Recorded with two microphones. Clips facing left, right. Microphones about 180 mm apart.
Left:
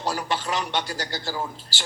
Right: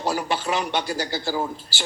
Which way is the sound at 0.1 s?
10° right (ahead or behind).